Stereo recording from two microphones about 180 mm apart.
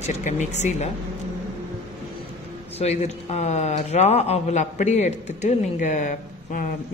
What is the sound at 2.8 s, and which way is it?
A man's voice, 35° left (ahead or behind).